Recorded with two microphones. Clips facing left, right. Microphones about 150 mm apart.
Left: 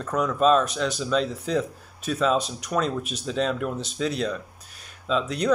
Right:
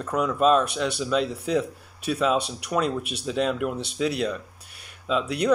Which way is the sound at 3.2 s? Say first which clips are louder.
Right 1 dB; 10° right (ahead or behind).